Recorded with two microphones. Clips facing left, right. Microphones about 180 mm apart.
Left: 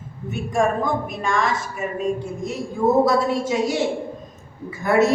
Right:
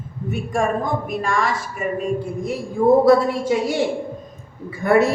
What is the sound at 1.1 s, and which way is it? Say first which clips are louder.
Speech: right 1 dB; centre (ahead or behind).